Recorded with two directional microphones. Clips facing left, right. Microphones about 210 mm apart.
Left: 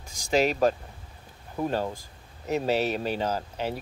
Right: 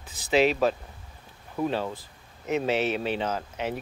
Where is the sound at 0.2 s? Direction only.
45° left (ahead or behind).